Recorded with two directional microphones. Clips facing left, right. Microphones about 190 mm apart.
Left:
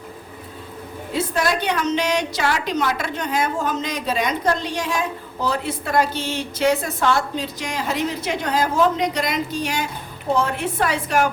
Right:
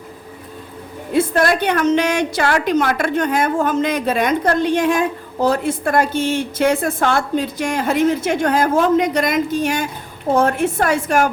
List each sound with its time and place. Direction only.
1.1 s a woman's voice: 55° right (ahead or behind)